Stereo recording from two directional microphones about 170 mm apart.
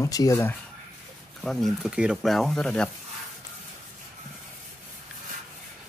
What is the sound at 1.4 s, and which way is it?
Speech, centre (ahead or behind).